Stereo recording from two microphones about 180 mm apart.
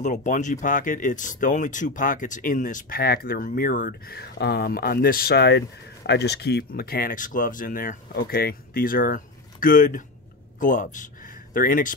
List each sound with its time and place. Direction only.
0.0 s speech: 45° left (ahead or behind)